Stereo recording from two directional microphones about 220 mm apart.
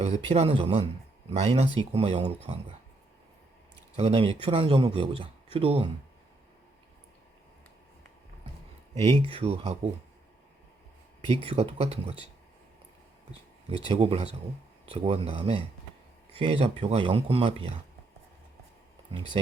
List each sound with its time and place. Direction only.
0.0 s speech: 30° right (ahead or behind)
3.9 s speech: 25° right (ahead or behind)
9.4 s speech: 30° right (ahead or behind)
11.4 s speech: 25° right (ahead or behind)
13.7 s speech: 25° right (ahead or behind)